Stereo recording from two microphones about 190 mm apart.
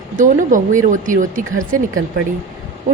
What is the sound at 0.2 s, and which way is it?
A woman's voice, 40° right (ahead or behind).